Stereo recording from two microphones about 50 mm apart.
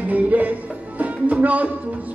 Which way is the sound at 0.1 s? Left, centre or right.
Right.